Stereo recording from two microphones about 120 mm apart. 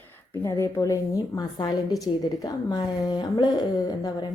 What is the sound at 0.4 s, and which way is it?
A woman's voice, 25° left (ahead or behind).